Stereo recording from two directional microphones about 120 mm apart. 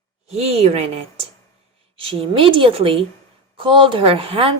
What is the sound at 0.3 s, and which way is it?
A woman's voice, 55° right (ahead or behind).